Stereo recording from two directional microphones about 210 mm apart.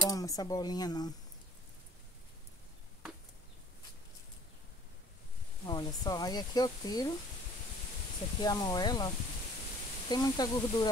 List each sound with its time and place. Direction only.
0.1 s speech: 15° left (ahead or behind)
5.7 s speech: 20° left (ahead or behind)
8.4 s speech: 20° left (ahead or behind)